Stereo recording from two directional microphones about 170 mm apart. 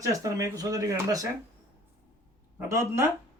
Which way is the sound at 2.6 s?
15° right (ahead or behind).